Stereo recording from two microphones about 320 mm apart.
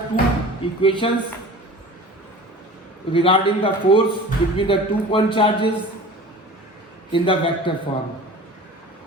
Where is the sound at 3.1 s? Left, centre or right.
Centre.